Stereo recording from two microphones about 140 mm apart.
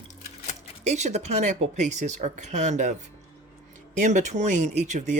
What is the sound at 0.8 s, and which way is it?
Speech, 55° right (ahead or behind).